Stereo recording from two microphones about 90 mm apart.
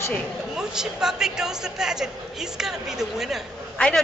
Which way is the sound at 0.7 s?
5° right (ahead or behind).